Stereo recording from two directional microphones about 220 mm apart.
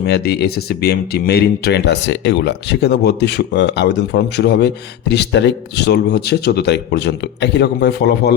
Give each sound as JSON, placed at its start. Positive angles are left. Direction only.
{"t": 0.0, "sound": "speech", "side_deg": 45}